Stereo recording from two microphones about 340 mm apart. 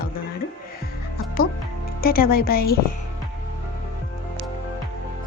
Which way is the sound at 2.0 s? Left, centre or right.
Left.